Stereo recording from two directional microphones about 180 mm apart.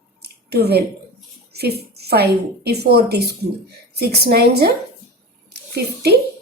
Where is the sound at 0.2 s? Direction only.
65° right (ahead or behind).